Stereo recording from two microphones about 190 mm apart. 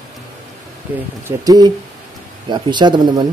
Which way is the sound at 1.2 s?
20° right (ahead or behind).